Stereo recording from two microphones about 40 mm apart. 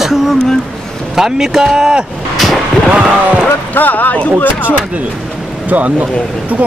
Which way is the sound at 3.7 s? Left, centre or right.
Left.